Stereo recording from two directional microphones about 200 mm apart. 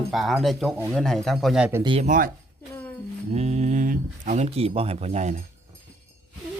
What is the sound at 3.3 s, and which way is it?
Speech, 35° right (ahead or behind).